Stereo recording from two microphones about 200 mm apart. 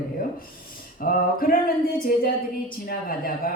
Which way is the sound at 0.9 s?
45° left (ahead or behind).